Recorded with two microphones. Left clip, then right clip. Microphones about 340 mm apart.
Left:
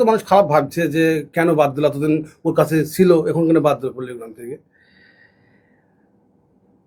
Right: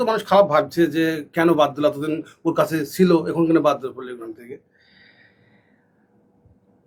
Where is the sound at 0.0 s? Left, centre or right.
Left.